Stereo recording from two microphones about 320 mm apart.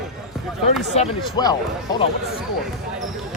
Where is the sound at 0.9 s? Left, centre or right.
Centre.